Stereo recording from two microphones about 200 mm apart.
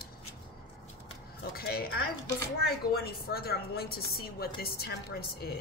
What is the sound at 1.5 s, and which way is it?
A woman's voice, 50° left (ahead or behind).